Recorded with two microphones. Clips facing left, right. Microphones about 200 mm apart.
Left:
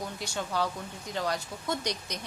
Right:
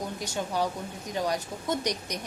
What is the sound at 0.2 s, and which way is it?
A woman's voice, 15° right (ahead or behind).